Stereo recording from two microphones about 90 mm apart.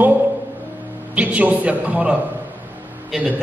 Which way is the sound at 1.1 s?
15° right (ahead or behind).